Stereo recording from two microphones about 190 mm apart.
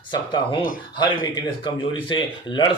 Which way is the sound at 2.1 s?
25° left (ahead or behind).